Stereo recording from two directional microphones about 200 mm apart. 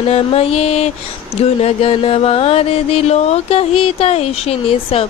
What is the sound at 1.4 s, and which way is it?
Music, 30° left (ahead or behind).